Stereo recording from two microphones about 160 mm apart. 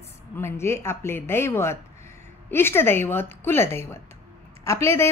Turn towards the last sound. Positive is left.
turn(degrees=15)  # may be behind; listen again after turning